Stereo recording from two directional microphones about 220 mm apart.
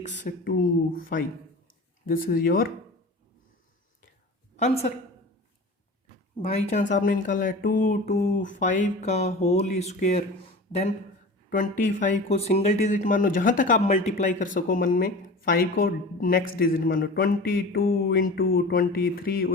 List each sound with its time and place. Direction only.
0.2 s speech: 40° left (ahead or behind)
2.3 s speech: 40° left (ahead or behind)
4.5 s a woman's voice: 30° left (ahead or behind)
6.9 s speech: 35° left (ahead or behind)
17.7 s mantra: 45° left (ahead or behind)